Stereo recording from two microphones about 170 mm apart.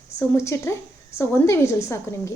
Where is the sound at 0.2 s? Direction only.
15° left (ahead or behind).